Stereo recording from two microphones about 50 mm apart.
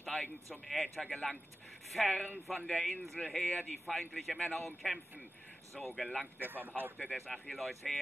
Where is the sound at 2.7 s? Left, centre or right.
Centre.